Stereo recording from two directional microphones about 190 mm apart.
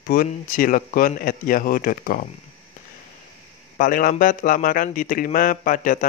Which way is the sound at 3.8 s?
45° left (ahead or behind).